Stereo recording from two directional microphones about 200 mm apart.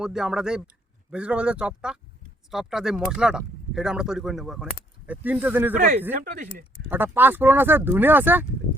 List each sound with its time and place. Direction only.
0.0 s speech: 5° right (ahead or behind)
6.1 s speech: 40° right (ahead or behind)
6.8 s speech: 10° right (ahead or behind)